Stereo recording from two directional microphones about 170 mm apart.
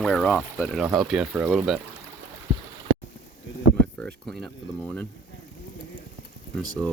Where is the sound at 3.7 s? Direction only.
5° left (ahead or behind).